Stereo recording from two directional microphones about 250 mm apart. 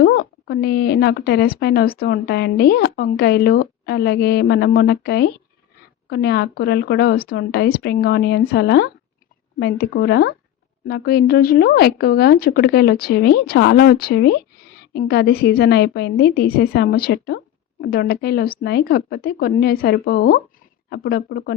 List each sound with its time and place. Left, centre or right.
0.0 s speech: left